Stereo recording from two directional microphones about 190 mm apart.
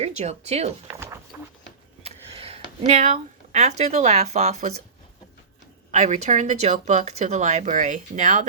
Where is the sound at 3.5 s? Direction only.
35° right (ahead or behind).